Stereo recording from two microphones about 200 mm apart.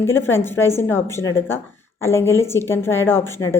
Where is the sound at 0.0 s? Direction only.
10° left (ahead or behind).